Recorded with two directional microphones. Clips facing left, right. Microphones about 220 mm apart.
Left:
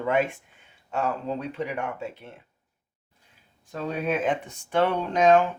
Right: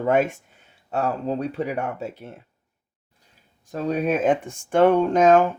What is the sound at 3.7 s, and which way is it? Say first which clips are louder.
Speech: right 5 dB; 40° right (ahead or behind).